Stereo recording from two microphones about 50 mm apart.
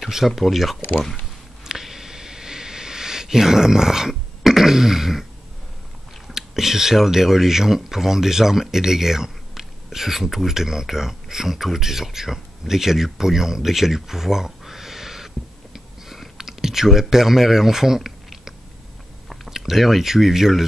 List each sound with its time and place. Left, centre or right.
0.0 s speech: centre
1.6 s a sound: centre
4.4 s throat clearing: centre
6.2 s speech: centre